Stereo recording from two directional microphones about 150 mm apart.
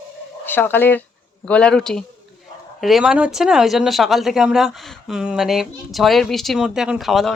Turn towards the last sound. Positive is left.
turn(degrees=0)  # may be behind; listen again after turning